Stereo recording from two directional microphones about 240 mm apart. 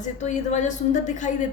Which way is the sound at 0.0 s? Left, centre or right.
Left.